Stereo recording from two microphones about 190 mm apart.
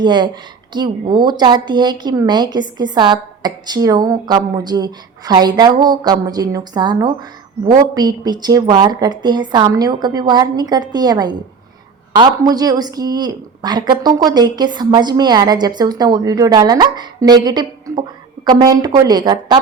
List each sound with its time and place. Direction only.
0.0 s a woman's voice: 25° right (ahead or behind)